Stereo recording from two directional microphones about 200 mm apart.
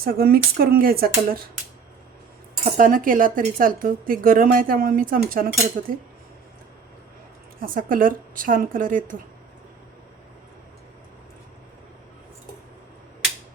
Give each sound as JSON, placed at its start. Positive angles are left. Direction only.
{"t": 0.0, "sound": "speech", "side_deg": -50}
{"t": 2.7, "sound": "speech", "side_deg": -45}
{"t": 7.6, "sound": "speech", "side_deg": -45}